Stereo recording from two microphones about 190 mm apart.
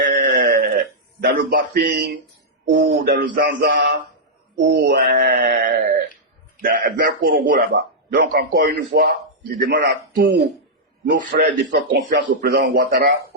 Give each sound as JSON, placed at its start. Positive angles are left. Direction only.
{"t": 0.0, "sound": "a sound", "side_deg": -55}
{"t": 1.2, "sound": "a man's voice", "side_deg": -55}
{"t": 4.5, "sound": "a man's voice", "side_deg": -65}
{"t": 5.3, "sound": "speech", "side_deg": -45}
{"t": 6.7, "sound": "a man's voice", "side_deg": -65}